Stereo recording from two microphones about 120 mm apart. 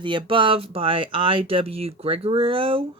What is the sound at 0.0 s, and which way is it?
Speech, 45° right (ahead or behind).